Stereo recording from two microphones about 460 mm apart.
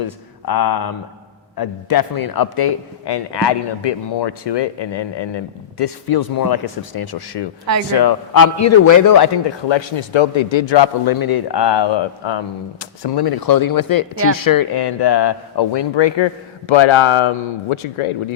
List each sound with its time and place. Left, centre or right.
0.0 s a man's voice: left